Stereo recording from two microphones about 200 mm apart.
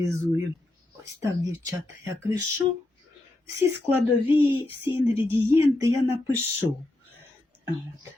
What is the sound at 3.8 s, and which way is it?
Speech, 10° right (ahead or behind).